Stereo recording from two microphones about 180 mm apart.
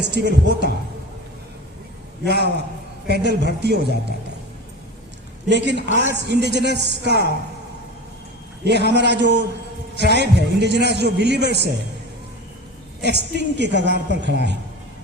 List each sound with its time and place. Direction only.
0.0 s a man's voice: 70° right (ahead or behind)
2.2 s a man's voice: 70° right (ahead or behind)
5.5 s a man's voice: 75° right (ahead or behind)
8.6 s a man's voice: 70° right (ahead or behind)
13.0 s a man's voice: 70° right (ahead or behind)